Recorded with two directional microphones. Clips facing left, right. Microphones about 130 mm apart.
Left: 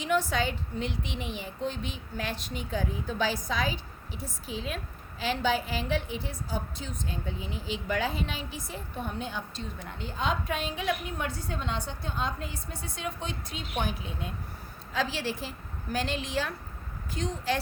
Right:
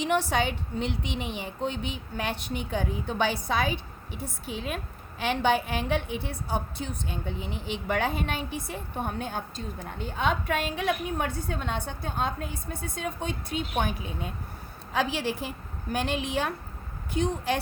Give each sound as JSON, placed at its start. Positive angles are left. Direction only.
{"t": 0.0, "sound": "a woman's voice", "side_deg": -70}
{"t": 14.9, "sound": "a woman's voice", "side_deg": -60}